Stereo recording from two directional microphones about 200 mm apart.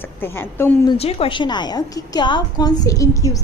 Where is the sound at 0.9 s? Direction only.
30° left (ahead or behind).